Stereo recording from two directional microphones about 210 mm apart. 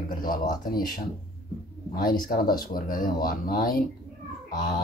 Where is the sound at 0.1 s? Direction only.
40° left (ahead or behind).